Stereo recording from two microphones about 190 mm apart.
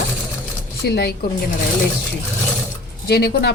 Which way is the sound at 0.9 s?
60° left (ahead or behind).